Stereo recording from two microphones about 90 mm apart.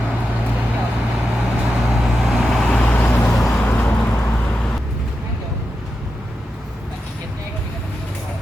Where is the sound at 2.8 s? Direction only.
15° left (ahead or behind).